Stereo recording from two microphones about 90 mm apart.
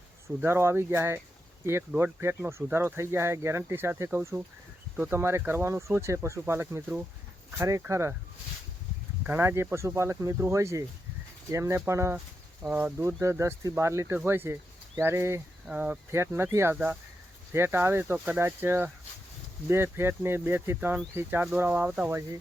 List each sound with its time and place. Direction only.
0.4 s speech: 30° right (ahead or behind)
2.2 s speech: 30° right (ahead or behind)
9.2 s speech: 25° right (ahead or behind)
15.6 s speech: 10° right (ahead or behind)
16.4 s speech: 25° right (ahead or behind)
16.7 s speech: 15° right (ahead or behind)
17.5 s speech: 25° right (ahead or behind)